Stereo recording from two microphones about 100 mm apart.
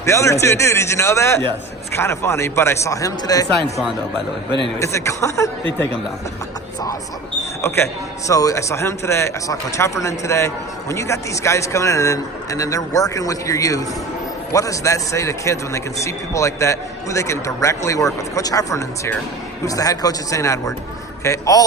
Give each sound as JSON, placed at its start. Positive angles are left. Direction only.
{"t": 0.0, "sound": "a man's voice", "side_deg": 30}
{"t": 4.8, "sound": "a man's voice", "side_deg": 30}
{"t": 8.3, "sound": "speech", "side_deg": 35}